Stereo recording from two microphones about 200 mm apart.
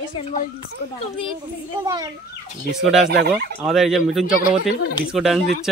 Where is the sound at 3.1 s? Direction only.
55° right (ahead or behind).